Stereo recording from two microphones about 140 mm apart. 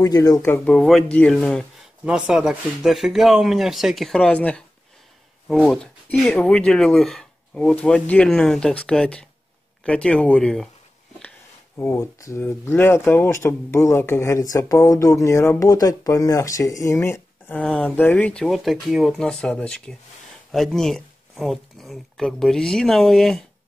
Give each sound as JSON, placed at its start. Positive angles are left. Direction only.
{"t": 0.0, "sound": "speech", "side_deg": 25}
{"t": 0.7, "sound": "speech", "side_deg": 5}
{"t": 2.0, "sound": "speech", "side_deg": -5}
{"t": 11.8, "sound": "speech", "side_deg": 20}